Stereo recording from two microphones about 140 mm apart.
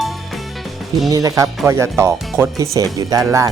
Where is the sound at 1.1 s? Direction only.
25° right (ahead or behind).